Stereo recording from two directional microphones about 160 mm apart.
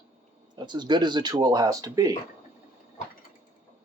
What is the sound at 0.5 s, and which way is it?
Speech, 25° right (ahead or behind).